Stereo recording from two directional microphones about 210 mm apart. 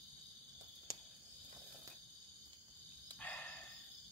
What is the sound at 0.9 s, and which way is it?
Cricket, 15° right (ahead or behind).